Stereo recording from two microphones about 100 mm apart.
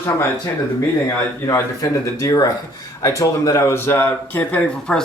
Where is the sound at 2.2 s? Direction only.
35° left (ahead or behind).